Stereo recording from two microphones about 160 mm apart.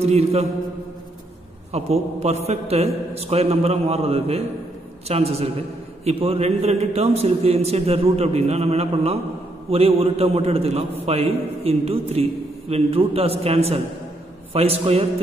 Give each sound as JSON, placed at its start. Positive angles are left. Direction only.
{"t": 0.0, "sound": "a man's voice", "side_deg": -40}
{"t": 1.7, "sound": "a man's voice", "side_deg": -40}